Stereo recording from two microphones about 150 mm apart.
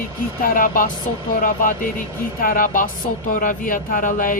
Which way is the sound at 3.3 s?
65° left (ahead or behind).